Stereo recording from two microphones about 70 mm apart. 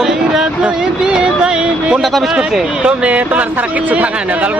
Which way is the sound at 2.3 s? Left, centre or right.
Centre.